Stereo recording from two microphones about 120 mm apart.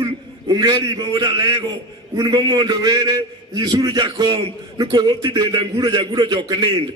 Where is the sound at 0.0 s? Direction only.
35° right (ahead or behind).